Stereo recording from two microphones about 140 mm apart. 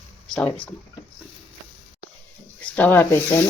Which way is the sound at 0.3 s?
10° left (ahead or behind).